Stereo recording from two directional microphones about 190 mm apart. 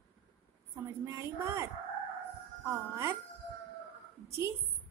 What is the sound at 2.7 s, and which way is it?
Speech, 15° right (ahead or behind).